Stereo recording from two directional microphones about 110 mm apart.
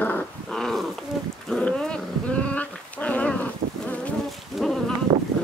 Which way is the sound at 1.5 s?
5° left (ahead or behind).